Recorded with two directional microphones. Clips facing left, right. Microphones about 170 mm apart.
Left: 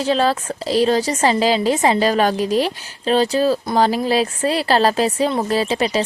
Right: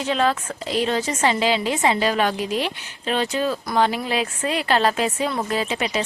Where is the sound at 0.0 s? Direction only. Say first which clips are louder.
Left 4 dB; 35° left (ahead or behind).